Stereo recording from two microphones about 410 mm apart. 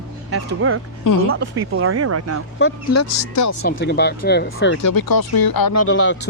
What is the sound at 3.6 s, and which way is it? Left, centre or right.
Speech, left.